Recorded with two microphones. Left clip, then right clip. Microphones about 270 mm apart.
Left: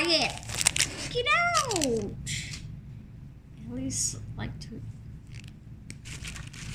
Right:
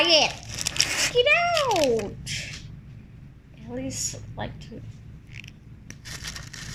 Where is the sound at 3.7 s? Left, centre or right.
Left.